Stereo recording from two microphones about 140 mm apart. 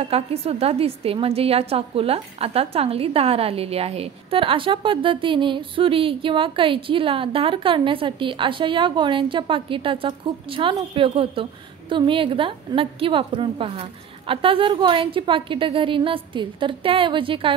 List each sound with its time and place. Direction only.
0.0 s a woman's voice: 45° right (ahead or behind)